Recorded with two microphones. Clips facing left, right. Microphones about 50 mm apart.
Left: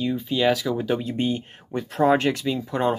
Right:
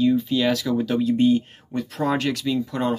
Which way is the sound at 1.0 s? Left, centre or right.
Left.